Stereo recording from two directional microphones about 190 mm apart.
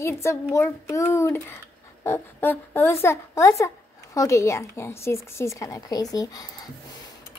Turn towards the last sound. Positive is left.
turn(degrees=20)  # may be behind; listen again after turning